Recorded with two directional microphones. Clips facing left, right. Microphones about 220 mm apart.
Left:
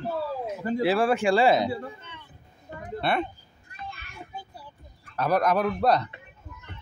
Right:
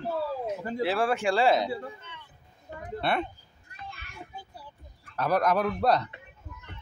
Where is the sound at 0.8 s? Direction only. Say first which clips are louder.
Left 3 dB; 5° left (ahead or behind).